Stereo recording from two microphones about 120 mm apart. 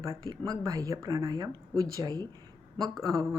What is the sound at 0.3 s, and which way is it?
Speech, 30° right (ahead or behind).